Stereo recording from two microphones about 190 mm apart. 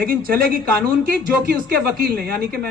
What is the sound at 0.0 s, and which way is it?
A man's voice, 50° right (ahead or behind).